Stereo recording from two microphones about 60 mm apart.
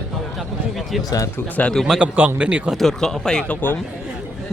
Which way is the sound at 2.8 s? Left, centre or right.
Centre.